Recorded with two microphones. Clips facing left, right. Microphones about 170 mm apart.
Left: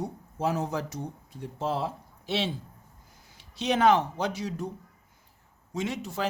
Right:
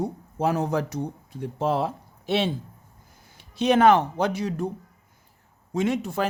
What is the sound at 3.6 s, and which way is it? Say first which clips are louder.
A man's voice: right 5 dB; 55° right (ahead or behind).